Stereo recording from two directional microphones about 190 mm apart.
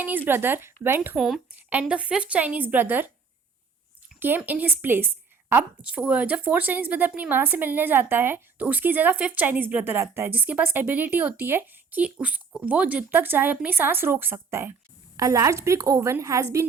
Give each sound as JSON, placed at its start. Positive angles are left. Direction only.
{"t": 0.0, "sound": "a woman's voice", "side_deg": -10}
{"t": 4.2, "sound": "a woman's voice", "side_deg": -10}